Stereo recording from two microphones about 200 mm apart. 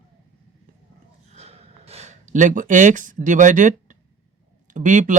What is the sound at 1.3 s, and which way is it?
Gasp, 30° right (ahead or behind).